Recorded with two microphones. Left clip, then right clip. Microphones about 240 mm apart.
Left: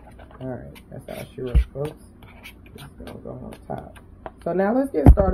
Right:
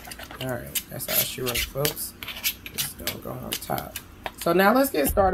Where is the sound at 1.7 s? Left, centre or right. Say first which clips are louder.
Right 1 dB; right.